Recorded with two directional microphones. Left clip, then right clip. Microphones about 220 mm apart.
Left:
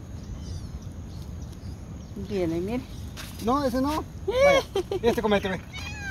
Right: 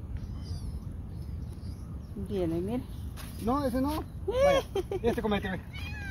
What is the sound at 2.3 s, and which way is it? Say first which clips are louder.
Speech: left 4 dB; centre (ahead or behind).